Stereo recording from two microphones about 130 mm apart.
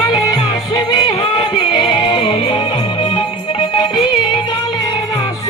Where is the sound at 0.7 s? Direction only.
40° left (ahead or behind).